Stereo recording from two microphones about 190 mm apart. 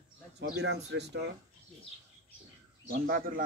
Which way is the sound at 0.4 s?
60° right (ahead or behind).